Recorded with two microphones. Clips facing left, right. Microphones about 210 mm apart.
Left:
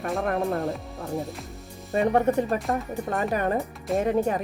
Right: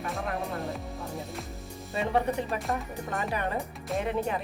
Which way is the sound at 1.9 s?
45° left (ahead or behind).